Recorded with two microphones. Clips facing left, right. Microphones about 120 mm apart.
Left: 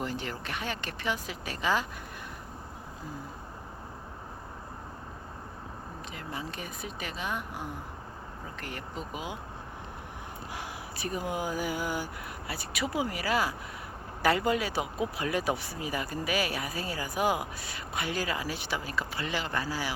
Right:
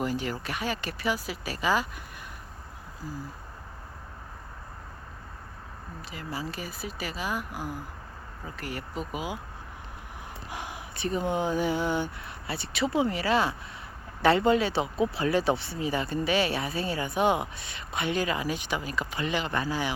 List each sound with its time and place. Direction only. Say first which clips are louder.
0.0 s speech: right 5 dB; 10° right (ahead or behind)
6.1 s speech: right 4 dB; 5° right (ahead or behind)
11.0 s speech: right 5 dB; 25° right (ahead or behind)